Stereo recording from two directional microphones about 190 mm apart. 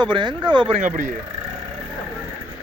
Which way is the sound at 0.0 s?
25° right (ahead or behind).